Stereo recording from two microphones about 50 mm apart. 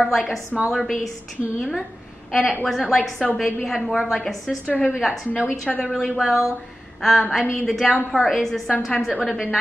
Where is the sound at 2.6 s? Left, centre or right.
Centre.